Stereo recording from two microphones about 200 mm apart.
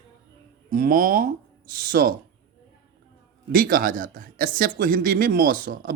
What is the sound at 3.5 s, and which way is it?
Speech, 45° right (ahead or behind).